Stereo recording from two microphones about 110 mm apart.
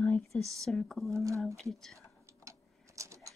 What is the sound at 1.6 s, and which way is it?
Speech, 5° left (ahead or behind).